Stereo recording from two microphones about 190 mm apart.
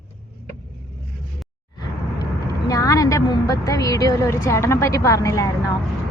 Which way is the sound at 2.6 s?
20° left (ahead or behind).